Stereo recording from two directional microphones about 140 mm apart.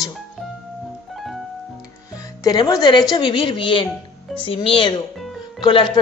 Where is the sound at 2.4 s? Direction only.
30° left (ahead or behind).